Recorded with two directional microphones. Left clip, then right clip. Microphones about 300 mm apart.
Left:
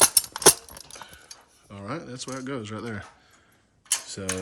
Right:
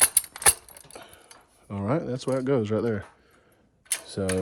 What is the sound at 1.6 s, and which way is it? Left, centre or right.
Speech, centre.